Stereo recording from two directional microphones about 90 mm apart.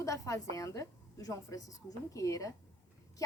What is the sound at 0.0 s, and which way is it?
A woman's voice, 40° left (ahead or behind).